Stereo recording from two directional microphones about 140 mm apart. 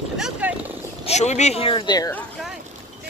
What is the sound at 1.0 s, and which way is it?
Speech, 50° left (ahead or behind).